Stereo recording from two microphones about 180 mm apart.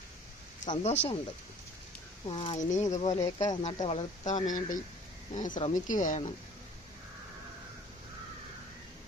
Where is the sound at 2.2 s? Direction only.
30° left (ahead or behind).